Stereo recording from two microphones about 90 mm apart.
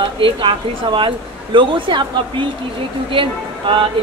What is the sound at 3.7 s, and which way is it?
Speech, 85° right.